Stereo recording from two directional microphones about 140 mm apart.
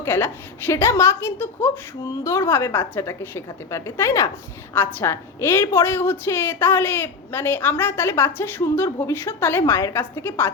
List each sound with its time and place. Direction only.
0.0 s a woman's voice: 15° left (ahead or behind)